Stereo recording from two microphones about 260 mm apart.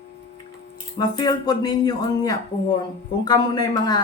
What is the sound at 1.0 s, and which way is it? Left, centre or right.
Speech, centre.